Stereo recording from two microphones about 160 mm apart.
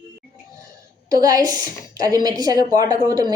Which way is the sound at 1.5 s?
25° right (ahead or behind).